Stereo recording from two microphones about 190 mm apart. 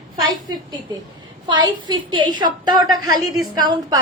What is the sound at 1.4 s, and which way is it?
A woman's voice, 25° right (ahead or behind).